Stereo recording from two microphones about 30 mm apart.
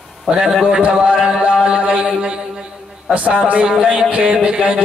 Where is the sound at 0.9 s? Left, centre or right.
Right.